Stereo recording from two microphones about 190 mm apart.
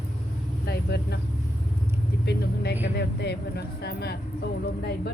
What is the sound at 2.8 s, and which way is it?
Speech, 60° left (ahead or behind).